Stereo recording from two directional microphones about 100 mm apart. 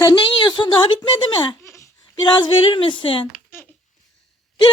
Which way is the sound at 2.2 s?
55° left (ahead or behind).